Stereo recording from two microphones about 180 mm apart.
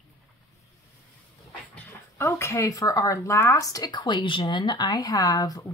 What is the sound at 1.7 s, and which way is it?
Speech, 15° left (ahead or behind).